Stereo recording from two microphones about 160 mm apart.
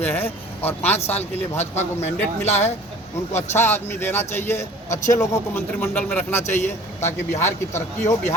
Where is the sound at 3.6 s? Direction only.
15° left (ahead or behind).